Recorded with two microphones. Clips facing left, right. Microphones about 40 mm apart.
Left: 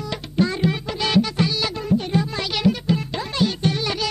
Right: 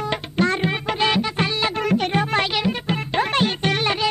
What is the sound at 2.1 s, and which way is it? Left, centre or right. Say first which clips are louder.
Music: right 3 dB; right.